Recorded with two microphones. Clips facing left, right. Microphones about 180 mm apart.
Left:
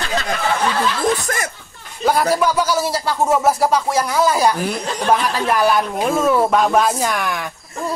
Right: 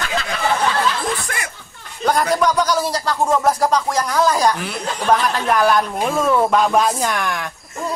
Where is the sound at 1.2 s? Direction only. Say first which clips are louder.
Left 5 dB; 40° left (ahead or behind).